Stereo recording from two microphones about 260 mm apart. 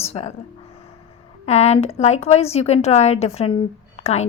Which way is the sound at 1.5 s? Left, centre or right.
Left.